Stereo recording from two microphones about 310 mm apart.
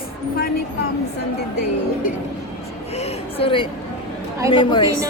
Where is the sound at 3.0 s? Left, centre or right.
Centre.